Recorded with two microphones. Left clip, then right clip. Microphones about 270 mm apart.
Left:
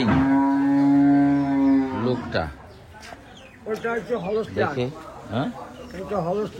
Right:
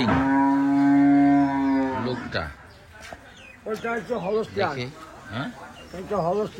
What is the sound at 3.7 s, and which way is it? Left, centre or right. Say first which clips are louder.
Speech: left 2 dB; right.